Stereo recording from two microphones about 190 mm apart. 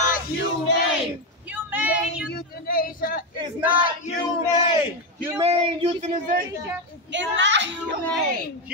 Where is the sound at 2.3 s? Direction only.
50° left (ahead or behind).